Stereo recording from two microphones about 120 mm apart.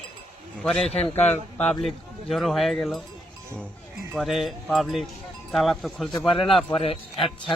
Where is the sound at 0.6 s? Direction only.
5° left (ahead or behind).